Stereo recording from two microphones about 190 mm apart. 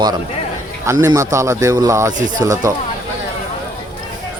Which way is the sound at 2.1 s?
40° right (ahead or behind).